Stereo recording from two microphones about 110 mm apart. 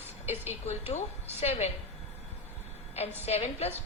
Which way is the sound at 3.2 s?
75° left (ahead or behind).